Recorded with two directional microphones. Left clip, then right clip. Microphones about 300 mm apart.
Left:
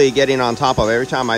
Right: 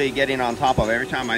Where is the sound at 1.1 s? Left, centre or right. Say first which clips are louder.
Left 6 dB; centre.